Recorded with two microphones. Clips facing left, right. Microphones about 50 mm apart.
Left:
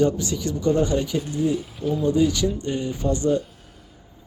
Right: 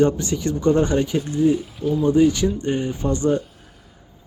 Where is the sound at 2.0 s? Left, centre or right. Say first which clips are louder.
Right 4 dB; right.